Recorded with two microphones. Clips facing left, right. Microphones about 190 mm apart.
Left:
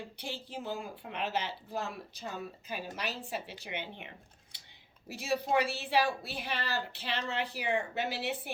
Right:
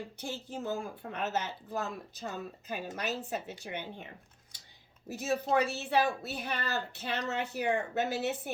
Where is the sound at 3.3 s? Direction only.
50° right (ahead or behind).